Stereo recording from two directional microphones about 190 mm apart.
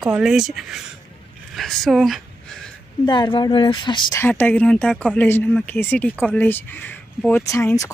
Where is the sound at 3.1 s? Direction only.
25° left (ahead or behind).